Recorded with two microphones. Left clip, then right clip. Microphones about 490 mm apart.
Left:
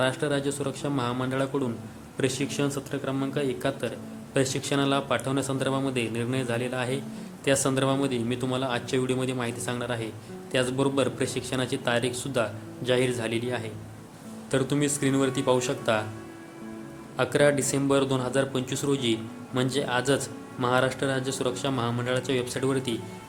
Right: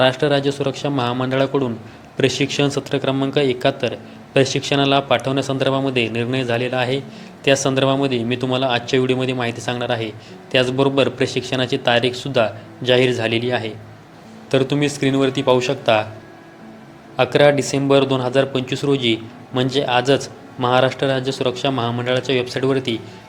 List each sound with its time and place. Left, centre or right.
0.0 s a man's voice: left
17.2 s a man's voice: left